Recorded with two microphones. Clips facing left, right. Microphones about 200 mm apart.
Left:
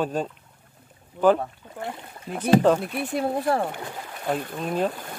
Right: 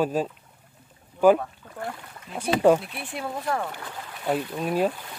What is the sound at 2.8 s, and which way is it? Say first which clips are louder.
Speech: left 8 dB; 45° left (ahead or behind).